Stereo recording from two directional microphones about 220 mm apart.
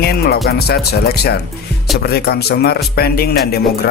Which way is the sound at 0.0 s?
45° left (ahead or behind).